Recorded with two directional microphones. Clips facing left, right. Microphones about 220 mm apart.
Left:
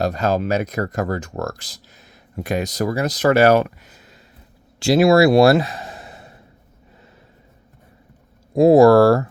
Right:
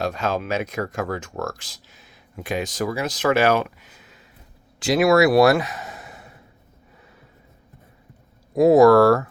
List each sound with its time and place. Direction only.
0.0 s speech: 40° left (ahead or behind)
4.8 s speech: 30° left (ahead or behind)
8.5 s speech: 30° left (ahead or behind)